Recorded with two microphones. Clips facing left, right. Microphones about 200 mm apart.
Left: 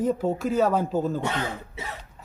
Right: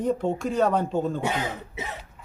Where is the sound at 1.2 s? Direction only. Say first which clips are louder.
Right 1 dB; 15° right (ahead or behind).